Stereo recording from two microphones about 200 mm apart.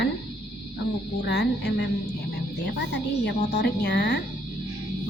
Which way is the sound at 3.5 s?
55° left (ahead or behind).